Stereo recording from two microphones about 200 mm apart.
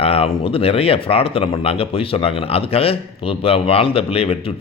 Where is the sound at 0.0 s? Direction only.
30° left (ahead or behind).